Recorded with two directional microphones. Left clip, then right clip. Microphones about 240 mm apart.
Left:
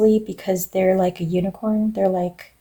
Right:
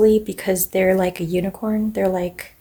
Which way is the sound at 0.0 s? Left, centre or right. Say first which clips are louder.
Right 2 dB; right.